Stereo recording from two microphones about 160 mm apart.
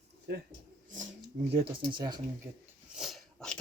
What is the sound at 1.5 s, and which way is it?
Speech, 35° right (ahead or behind).